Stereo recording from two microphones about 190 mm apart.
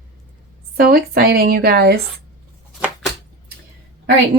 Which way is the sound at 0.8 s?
55° right (ahead or behind).